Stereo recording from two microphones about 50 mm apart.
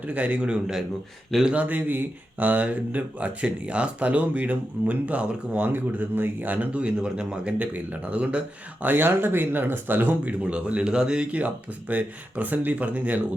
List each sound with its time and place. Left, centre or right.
0.1 s speech: right
1.3 s a man's voice: centre
1.5 s speech: right
5.7 s speech: right
6.9 s speech: centre
7.6 s speech: right
8.9 s speech: right
10.5 s a man's voice: right
11.3 s speech: right